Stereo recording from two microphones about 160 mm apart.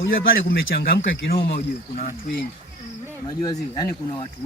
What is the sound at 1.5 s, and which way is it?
Speech, 50° left (ahead or behind).